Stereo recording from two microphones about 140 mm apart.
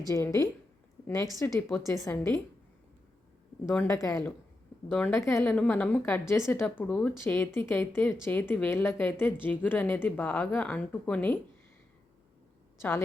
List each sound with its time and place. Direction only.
0.1 s a woman's voice: 20° left (ahead or behind)
3.7 s a woman's voice: 20° left (ahead or behind)
5.5 s a woman's voice: 10° left (ahead or behind)